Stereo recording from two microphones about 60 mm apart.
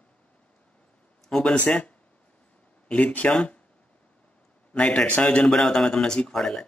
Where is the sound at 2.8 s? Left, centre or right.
Left.